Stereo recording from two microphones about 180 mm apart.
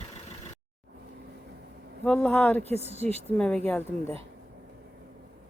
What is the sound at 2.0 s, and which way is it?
Speech, 5° left (ahead or behind).